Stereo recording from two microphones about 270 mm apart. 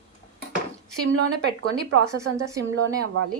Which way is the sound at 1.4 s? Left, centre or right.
Right.